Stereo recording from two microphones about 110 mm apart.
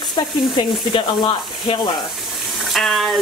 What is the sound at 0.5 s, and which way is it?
Speech, 50° left (ahead or behind).